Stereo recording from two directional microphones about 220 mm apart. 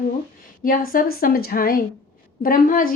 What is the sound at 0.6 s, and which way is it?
Speech, 40° left (ahead or behind).